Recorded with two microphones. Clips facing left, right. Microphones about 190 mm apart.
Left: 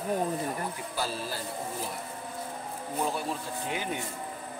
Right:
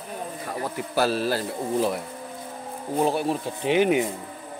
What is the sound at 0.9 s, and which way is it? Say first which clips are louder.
A man's voice: right 14 dB; 80° right.